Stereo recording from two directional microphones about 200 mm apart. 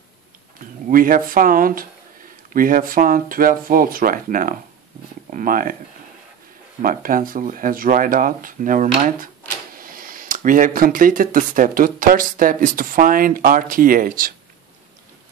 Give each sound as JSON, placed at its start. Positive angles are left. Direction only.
{"t": 0.6, "sound": "speech", "side_deg": -45}
{"t": 6.8, "sound": "speech", "side_deg": -45}